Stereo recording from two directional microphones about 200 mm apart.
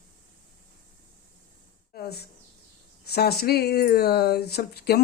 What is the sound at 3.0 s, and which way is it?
Speech, 50° left (ahead or behind).